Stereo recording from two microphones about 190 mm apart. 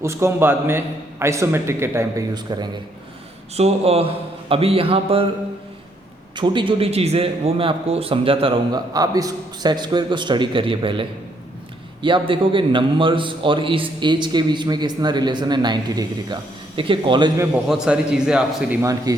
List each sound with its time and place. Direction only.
0.0 s a man's voice: 15° right (ahead or behind)
3.5 s a man's voice: 35° right (ahead or behind)
6.3 s a man's voice: 25° right (ahead or behind)
12.0 s a man's voice: 25° right (ahead or behind); by 18.9 s 5° right (ahead or behind)
19.1 s a man's voice: 20° right (ahead or behind)